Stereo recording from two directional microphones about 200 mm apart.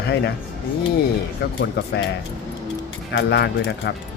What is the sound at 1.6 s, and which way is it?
Speech, 55° left (ahead or behind).